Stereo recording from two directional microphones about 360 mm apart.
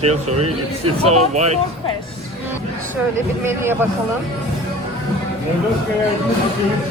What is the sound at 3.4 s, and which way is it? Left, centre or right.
Speech, centre.